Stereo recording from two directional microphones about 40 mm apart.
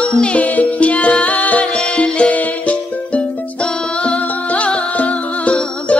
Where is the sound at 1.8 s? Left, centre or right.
Left.